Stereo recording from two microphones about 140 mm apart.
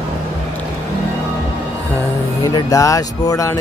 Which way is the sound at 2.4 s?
25° left (ahead or behind).